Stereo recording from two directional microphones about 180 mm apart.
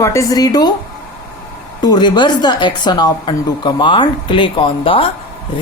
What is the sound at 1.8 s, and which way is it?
Speech, 25° left (ahead or behind).